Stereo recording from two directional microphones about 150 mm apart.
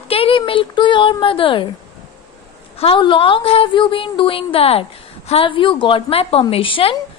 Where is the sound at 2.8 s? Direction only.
35° left (ahead or behind).